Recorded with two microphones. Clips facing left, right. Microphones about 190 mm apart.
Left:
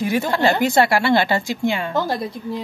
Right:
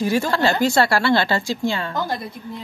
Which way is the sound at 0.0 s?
20° left (ahead or behind).